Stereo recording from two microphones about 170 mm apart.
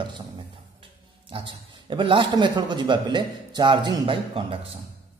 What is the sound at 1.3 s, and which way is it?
A man's voice, 30° right (ahead or behind).